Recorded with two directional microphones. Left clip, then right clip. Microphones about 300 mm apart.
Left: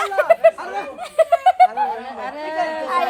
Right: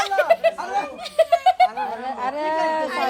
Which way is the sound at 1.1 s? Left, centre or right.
Centre.